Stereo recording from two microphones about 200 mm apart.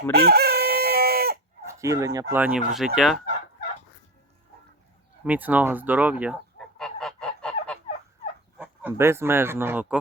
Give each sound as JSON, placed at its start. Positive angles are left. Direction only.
{"t": 0.1, "sound": "chicken", "side_deg": -50}
{"t": 1.6, "sound": "speech", "side_deg": -15}
{"t": 5.2, "sound": "speech", "side_deg": -10}
{"t": 6.6, "sound": "goose", "side_deg": 5}
{"t": 8.5, "sound": "speech", "side_deg": -5}